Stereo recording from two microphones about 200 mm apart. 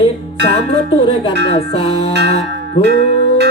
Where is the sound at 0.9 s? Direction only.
30° left (ahead or behind).